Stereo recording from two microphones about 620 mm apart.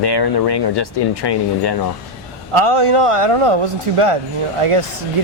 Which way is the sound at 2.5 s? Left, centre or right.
Right.